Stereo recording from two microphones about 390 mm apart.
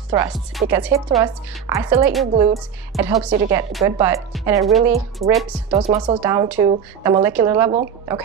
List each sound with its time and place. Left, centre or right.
0.1 s a woman's voice: centre
5.2 s a woman's voice: centre